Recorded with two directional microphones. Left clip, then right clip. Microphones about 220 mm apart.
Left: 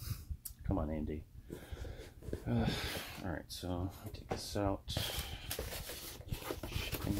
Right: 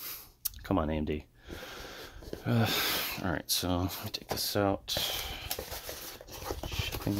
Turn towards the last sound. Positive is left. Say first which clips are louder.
# right 6 dB
turn(degrees=-50)  # may be behind; listen again after turning